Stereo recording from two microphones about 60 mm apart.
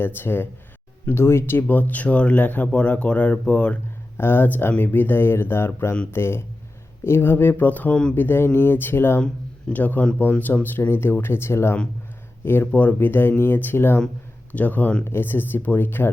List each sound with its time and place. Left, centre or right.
0.0 s speech: left; by 3.8 s centre
4.2 s speech: left
12.7 s speech: left
14.5 s speech: left